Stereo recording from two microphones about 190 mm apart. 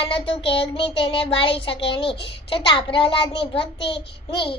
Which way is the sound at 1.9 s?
30° left (ahead or behind).